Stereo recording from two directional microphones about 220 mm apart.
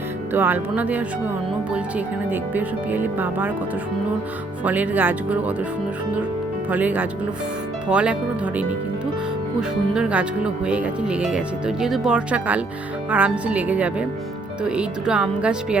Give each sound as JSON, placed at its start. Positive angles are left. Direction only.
{"t": 0.3, "sound": "speech", "side_deg": -10}
{"t": 2.3, "sound": "speech", "side_deg": -10}
{"t": 4.6, "sound": "speech", "side_deg": -5}
{"t": 6.7, "sound": "speech", "side_deg": -5}
{"t": 9.6, "sound": "speech", "side_deg": -5}